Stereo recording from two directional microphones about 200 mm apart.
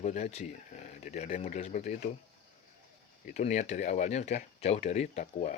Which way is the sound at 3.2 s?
35° left (ahead or behind).